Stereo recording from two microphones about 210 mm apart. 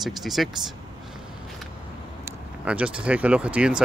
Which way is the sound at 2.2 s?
5° right (ahead or behind).